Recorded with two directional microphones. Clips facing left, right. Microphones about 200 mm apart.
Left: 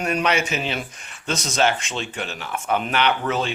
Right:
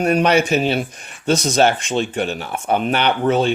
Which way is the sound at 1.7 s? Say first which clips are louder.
Right 6 dB; 50° right (ahead or behind).